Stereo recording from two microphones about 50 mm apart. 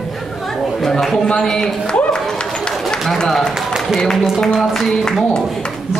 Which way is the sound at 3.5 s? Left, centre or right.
Centre.